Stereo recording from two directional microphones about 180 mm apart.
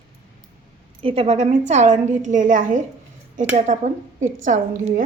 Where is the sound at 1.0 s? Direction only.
35° right (ahead or behind).